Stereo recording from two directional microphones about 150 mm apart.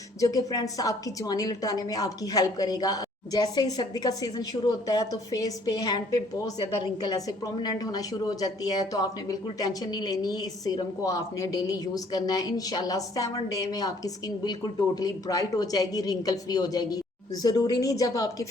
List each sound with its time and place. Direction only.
0.2 s a woman's voice: 25° left (ahead or behind)